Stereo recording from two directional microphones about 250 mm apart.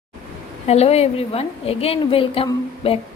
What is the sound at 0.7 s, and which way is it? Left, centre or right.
A woman's voice, left.